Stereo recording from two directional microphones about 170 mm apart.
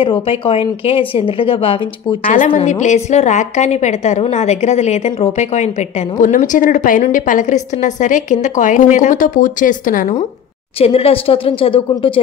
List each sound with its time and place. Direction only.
0.0 s a woman's voice: 35° left (ahead or behind)
2.3 s a woman's voice: 45° left (ahead or behind)
10.8 s a woman's voice: 35° left (ahead or behind)